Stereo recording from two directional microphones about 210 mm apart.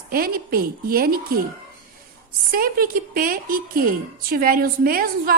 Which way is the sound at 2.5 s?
45° right (ahead or behind).